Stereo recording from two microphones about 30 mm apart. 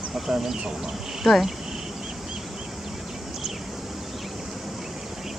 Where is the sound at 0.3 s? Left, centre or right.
Right.